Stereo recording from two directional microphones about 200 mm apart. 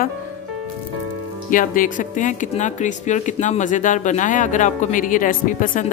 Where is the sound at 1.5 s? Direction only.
45° left (ahead or behind).